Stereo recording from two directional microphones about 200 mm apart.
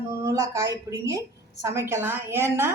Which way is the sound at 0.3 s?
15° right (ahead or behind).